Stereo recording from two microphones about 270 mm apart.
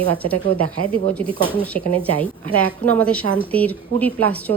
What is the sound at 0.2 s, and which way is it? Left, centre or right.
Speech, right.